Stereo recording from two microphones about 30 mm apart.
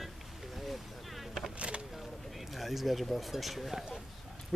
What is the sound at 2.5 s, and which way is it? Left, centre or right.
Speech, centre.